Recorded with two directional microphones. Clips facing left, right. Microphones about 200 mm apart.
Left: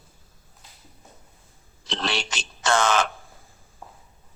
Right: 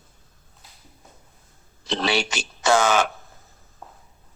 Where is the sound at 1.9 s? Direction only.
5° right (ahead or behind).